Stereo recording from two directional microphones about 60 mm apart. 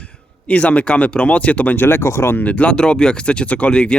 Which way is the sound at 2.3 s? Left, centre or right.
Left.